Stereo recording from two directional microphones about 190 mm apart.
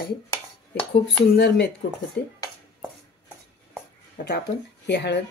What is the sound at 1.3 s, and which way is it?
Speech, 60° left (ahead or behind).